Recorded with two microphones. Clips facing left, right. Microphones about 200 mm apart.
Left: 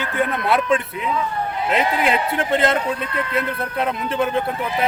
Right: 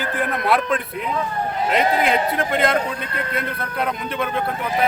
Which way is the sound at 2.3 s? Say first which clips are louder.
Left 1 dB; 30° left (ahead or behind).